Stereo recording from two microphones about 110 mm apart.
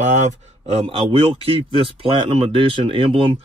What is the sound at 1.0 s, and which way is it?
Speech, 55° right (ahead or behind).